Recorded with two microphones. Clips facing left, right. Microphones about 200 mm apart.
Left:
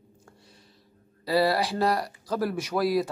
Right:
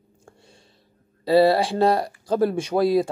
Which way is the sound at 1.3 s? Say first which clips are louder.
Right 7 dB; 25° right (ahead or behind).